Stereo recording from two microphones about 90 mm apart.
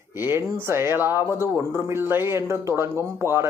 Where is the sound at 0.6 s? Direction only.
30° right (ahead or behind).